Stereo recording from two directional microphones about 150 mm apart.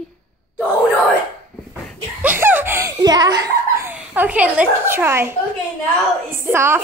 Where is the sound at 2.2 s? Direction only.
15° right (ahead or behind).